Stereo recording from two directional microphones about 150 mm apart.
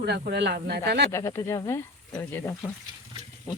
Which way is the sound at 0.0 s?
90° right.